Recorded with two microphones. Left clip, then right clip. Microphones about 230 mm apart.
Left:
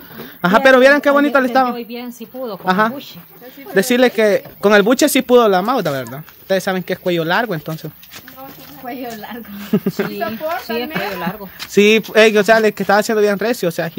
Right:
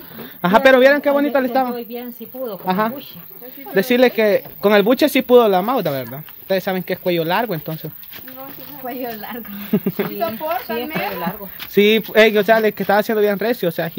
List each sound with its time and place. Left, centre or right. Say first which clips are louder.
0.4 s speech: left 1 dB; centre
1.8 s a woman's voice: left 1 dB; left
2.6 s speech: left 5 dB; centre
8.8 s a woman's voice: even; centre
9.7 s speech: left 2 dB; centre
11.7 s speech: left 2 dB; centre